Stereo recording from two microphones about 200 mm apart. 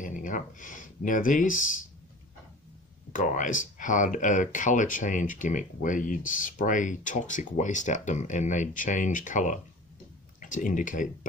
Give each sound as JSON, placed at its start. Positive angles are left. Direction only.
{"t": 0.0, "sound": "speech", "side_deg": 40}
{"t": 3.1, "sound": "speech", "side_deg": 40}